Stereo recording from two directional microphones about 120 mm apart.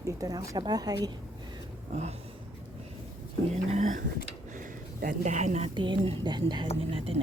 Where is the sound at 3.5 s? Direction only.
65° right (ahead or behind).